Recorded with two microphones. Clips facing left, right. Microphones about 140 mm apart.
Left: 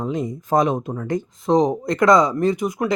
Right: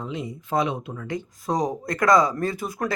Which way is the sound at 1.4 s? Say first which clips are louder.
Left 8 dB; 25° left (ahead or behind).